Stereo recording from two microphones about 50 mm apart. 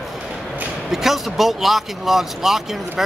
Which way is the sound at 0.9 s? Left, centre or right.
Centre.